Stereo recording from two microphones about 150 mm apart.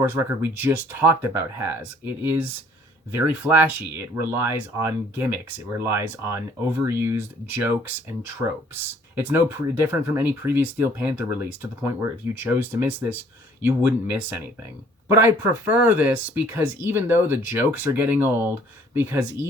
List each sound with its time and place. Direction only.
0.0 s speech: 15° right (ahead or behind)
15.6 s speech: 10° right (ahead or behind)